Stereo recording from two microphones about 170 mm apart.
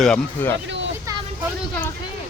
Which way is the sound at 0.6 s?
90° right.